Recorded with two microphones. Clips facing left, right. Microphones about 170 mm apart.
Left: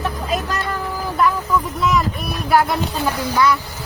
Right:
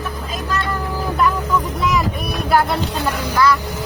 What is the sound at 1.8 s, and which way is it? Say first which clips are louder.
Vehicle: left 2 dB; centre (ahead or behind).